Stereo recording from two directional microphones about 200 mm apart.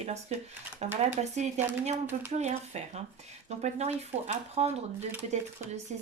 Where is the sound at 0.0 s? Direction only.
35° right (ahead or behind).